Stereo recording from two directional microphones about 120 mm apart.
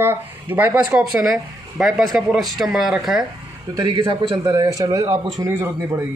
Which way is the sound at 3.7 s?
40° right (ahead or behind).